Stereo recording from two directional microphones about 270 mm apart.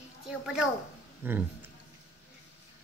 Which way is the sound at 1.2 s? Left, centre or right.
Centre.